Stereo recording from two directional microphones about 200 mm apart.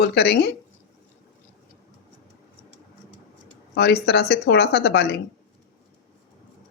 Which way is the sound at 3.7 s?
55° left (ahead or behind).